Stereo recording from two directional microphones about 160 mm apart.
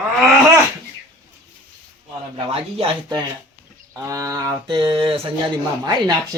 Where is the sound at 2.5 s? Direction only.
35° right (ahead or behind).